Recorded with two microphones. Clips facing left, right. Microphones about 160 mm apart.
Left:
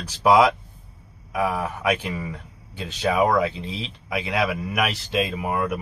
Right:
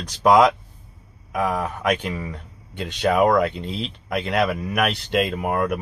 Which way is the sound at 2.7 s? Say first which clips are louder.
Right 3 dB; 70° right (ahead or behind).